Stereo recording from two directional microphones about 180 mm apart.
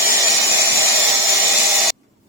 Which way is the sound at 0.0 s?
15° right (ahead or behind).